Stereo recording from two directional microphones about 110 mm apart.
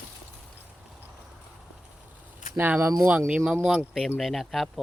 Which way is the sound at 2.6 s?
20° right (ahead or behind).